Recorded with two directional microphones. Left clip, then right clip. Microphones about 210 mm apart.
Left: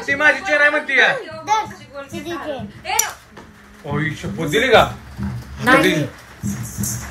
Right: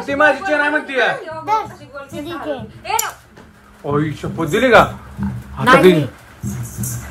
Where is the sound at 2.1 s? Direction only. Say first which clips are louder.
Right 2 dB; 30° right (ahead or behind).